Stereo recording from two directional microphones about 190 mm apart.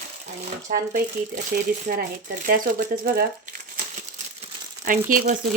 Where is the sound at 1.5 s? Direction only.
50° right (ahead or behind).